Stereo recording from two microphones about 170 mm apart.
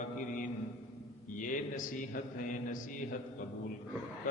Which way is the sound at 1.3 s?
50° left (ahead or behind).